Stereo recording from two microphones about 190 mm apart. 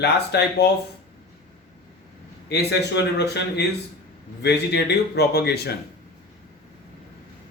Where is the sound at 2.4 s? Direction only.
60° left (ahead or behind).